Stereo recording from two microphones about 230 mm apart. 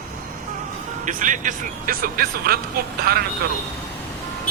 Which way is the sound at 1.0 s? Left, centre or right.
Right.